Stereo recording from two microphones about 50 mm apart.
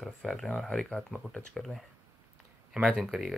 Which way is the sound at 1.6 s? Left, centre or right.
Centre.